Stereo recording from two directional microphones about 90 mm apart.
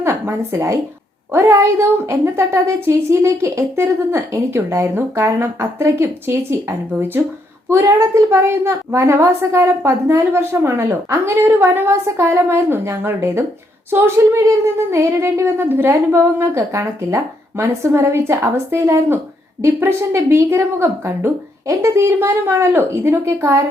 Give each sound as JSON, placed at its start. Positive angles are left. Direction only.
{"t": 0.0, "sound": "a woman's voice", "side_deg": -30}